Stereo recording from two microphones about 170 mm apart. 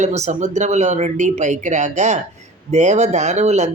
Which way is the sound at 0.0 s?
45° right (ahead or behind).